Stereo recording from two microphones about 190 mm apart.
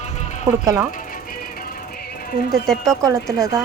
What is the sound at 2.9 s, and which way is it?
Speech, 15° right (ahead or behind).